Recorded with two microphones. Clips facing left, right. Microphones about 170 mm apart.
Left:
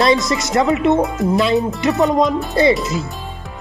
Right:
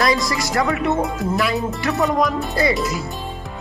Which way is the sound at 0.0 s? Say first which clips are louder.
Left 4 dB; 25° left (ahead or behind).